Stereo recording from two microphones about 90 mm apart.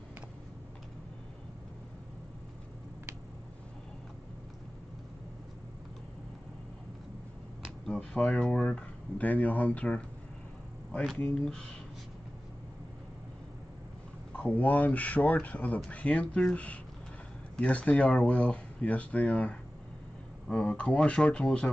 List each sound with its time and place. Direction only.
7.8 s speech: 10° left (ahead or behind)
11.1 s speech: 10° left (ahead or behind)
14.3 s speech: 15° left (ahead or behind)